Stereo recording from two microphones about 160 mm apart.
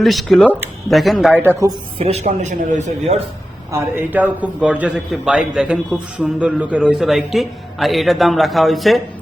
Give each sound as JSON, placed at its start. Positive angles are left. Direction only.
{"t": 0.0, "sound": "a man's voice", "side_deg": 0}
{"t": 1.3, "sound": "speech", "side_deg": -15}
{"t": 2.0, "sound": "speech", "side_deg": -40}
{"t": 3.7, "sound": "a man's voice", "side_deg": -15}